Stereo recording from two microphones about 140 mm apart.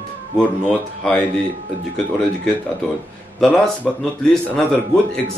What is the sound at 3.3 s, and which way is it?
A man's voice, 5° left (ahead or behind).